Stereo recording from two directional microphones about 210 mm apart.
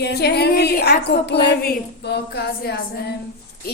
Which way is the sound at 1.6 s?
50° left (ahead or behind).